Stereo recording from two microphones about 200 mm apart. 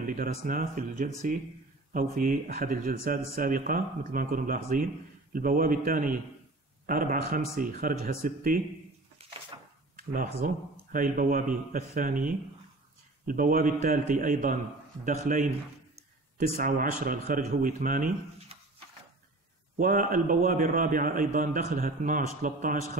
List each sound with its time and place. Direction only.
0.0 s a man's voice: 45° right (ahead or behind)
9.2 s a sound: 30° right (ahead or behind)
9.9 s a man's voice: 45° right (ahead or behind)
16.5 s a man's voice: 45° right (ahead or behind)
19.8 s a man's voice: 45° right (ahead or behind)